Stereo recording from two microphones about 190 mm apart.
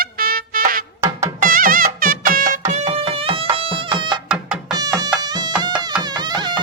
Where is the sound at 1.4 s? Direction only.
50° right (ahead or behind).